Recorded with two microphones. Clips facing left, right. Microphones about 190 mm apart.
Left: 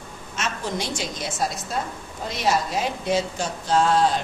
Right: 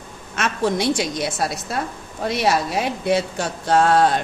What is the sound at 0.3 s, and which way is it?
A woman's voice, 65° right (ahead or behind).